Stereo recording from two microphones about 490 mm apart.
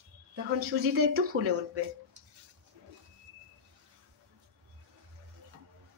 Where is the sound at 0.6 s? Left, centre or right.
Right.